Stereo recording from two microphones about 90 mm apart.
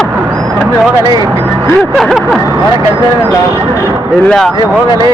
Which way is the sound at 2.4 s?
35° right (ahead or behind).